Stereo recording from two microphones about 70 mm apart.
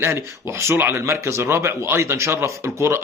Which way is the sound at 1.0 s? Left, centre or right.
Right.